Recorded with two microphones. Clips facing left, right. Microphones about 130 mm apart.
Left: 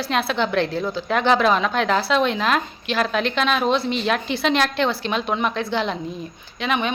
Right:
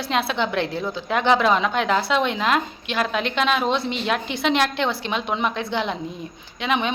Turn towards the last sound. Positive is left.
turn(degrees=-20)  # may be behind; listen again after turning